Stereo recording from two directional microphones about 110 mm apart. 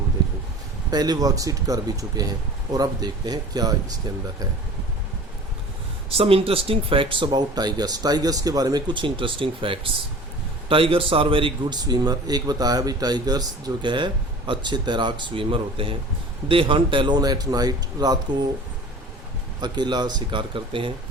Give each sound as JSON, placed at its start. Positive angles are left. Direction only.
{"t": 0.9, "sound": "speech", "side_deg": -40}
{"t": 6.1, "sound": "a man's voice", "side_deg": -60}
{"t": 17.2, "sound": "speech", "side_deg": -35}
{"t": 19.6, "sound": "speech", "side_deg": -40}